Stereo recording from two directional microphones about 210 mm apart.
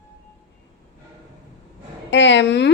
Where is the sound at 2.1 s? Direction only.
60° left (ahead or behind).